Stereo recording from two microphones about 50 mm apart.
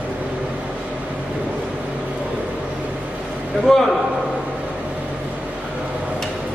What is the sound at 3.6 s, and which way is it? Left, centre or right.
Speech, centre.